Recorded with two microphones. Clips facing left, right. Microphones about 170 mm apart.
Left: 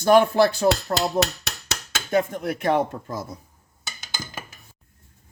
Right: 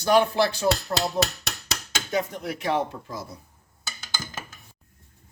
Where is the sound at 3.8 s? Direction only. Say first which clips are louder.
Even; 15° left (ahead or behind).